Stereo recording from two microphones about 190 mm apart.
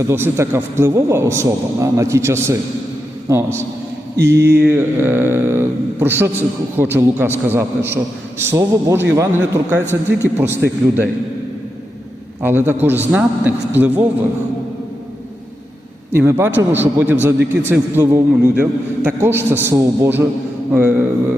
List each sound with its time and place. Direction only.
0.1 s a man's voice: 15° right (ahead or behind)
4.2 s mantra: 60° right (ahead or behind)
4.6 s a man's voice: 10° right (ahead or behind)
12.4 s a man's voice: 10° right (ahead or behind)
16.1 s a man's voice: 10° right (ahead or behind)